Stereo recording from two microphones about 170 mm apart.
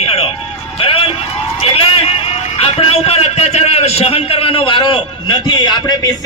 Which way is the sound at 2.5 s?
35° left (ahead or behind).